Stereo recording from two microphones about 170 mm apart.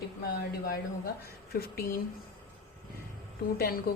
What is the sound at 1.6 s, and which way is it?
Speech, 60° left (ahead or behind).